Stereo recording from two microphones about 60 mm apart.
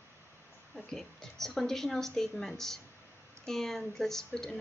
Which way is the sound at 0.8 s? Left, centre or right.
Centre.